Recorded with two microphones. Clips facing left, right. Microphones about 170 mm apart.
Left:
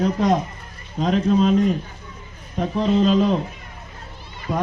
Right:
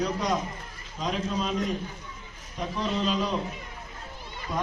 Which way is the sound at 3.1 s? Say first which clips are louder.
Left 10 dB; 45° left (ahead or behind).